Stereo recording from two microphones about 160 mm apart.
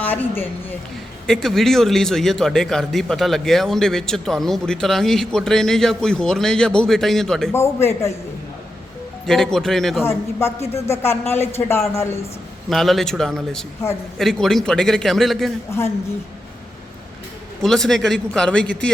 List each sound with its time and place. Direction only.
0.0 s a woman's voice: 10° left (ahead or behind)
7.5 s speech: 15° left (ahead or behind)
9.2 s speech: 5° left (ahead or behind)
10.0 s speech: 15° left (ahead or behind)
12.7 s speech: centre (ahead or behind)
17.6 s speech: centre (ahead or behind)